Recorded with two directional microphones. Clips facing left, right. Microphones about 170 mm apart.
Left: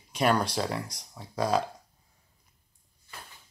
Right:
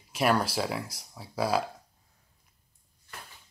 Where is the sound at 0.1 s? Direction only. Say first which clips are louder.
Even; 5° right (ahead or behind).